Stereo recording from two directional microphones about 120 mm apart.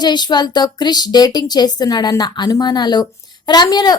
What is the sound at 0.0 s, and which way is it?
A woman's voice, 35° left (ahead or behind).